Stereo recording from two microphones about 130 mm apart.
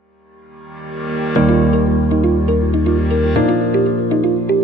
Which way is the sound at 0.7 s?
Centre (ahead or behind).